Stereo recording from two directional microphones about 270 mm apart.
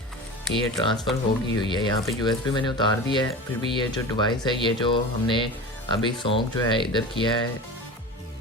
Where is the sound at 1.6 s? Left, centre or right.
Centre.